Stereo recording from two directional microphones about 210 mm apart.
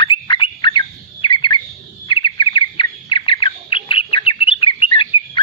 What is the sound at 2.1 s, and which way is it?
Bird, 25° left (ahead or behind).